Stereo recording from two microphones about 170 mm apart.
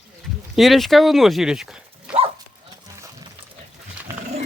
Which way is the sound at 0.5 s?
Centre (ahead or behind).